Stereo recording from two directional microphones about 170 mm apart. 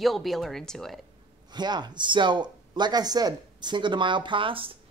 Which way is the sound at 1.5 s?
25° right (ahead or behind).